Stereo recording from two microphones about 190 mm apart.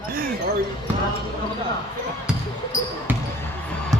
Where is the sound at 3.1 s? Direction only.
10° right (ahead or behind).